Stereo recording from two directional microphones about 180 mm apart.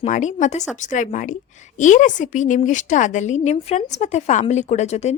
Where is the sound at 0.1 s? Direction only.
40° left (ahead or behind).